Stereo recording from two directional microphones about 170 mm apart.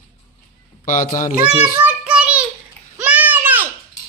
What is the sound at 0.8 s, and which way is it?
Speech, 50° left (ahead or behind).